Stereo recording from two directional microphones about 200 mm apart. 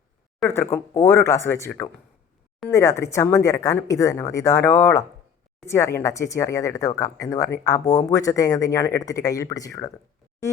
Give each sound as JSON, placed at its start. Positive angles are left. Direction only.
{"t": 0.4, "sound": "speech", "side_deg": 10}